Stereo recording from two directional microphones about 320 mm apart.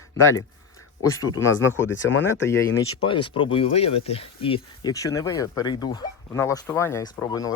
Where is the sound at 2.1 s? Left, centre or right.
Left.